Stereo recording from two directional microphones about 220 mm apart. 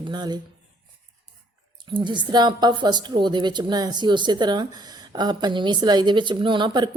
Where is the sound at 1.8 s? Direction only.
20° right (ahead or behind).